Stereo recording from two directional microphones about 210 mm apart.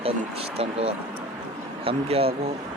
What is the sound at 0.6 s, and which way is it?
Speech, 30° right (ahead or behind).